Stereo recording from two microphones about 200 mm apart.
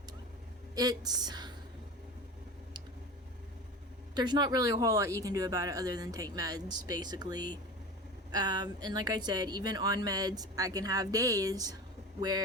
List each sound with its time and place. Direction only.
0.8 s speech: 20° right (ahead or behind)
4.1 s speech: 20° right (ahead or behind)